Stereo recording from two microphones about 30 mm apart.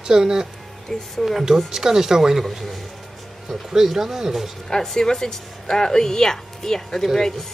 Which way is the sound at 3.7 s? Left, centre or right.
Centre.